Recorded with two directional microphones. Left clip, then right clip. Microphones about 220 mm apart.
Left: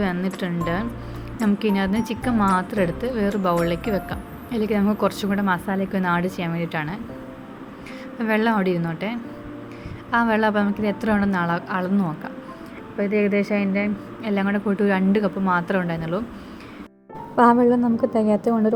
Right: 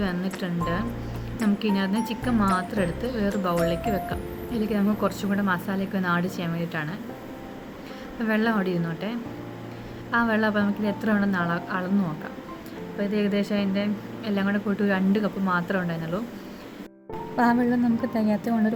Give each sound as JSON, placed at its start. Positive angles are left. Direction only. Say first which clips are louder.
{"t": 0.0, "sound": "music", "louder": "left 4 dB", "side_deg": 15}
{"t": 0.3, "sound": "a woman's voice", "louder": "left 3 dB", "side_deg": 15}
{"t": 8.2, "sound": "a woman's voice", "louder": "left 4 dB", "side_deg": 15}
{"t": 13.0, "sound": "a woman's voice", "louder": "left 5 dB", "side_deg": 15}
{"t": 17.3, "sound": "a woman's voice", "louder": "left 7 dB", "side_deg": 10}